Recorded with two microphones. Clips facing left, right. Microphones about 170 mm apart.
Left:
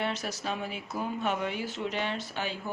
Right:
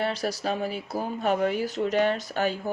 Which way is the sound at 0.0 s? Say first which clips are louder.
Right 5 dB; 35° right (ahead or behind).